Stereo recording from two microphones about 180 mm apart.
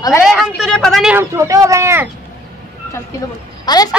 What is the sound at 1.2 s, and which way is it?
Speech, 15° right (ahead or behind).